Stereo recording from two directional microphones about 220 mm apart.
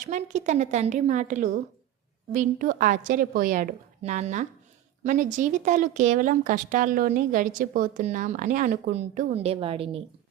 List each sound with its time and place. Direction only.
0.0 s a woman's voice: 35° right (ahead or behind)